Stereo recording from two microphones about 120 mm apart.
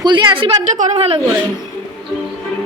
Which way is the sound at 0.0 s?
35° right (ahead or behind).